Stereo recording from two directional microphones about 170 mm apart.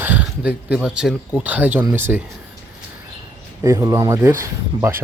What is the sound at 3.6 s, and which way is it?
Speech, 20° right (ahead or behind).